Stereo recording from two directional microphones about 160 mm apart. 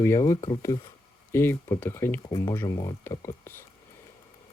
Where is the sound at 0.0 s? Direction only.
20° left (ahead or behind).